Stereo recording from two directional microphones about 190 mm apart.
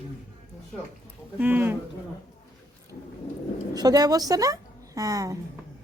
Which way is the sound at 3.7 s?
20° right (ahead or behind).